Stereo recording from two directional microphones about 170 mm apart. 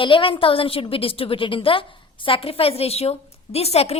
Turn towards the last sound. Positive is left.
turn(degrees=35)  # may be behind; listen again after turning